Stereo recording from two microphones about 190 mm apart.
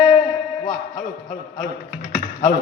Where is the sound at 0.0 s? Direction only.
35° left (ahead or behind).